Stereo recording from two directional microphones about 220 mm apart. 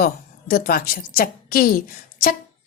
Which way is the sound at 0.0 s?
40° left (ahead or behind).